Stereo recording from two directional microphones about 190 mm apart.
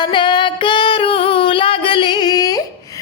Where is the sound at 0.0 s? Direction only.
25° left (ahead or behind).